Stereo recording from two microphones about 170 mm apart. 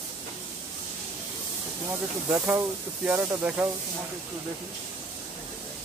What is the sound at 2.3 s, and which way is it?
Speech, 10° right (ahead or behind).